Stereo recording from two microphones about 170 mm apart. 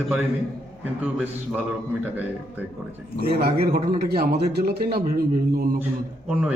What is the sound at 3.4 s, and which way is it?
Speech, 60° right (ahead or behind).